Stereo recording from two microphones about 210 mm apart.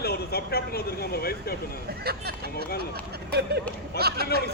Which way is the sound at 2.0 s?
50° right (ahead or behind).